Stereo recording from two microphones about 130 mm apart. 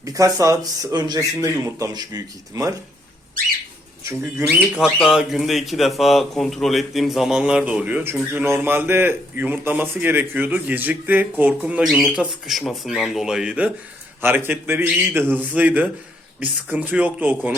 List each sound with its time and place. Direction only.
0.0 s speech: 25° right (ahead or behind)
4.0 s speech: 20° right (ahead or behind)
4.8 s speech: 5° right (ahead or behind)